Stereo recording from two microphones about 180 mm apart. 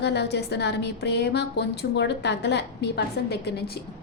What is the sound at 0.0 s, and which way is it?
A woman's voice, 70° left (ahead or behind).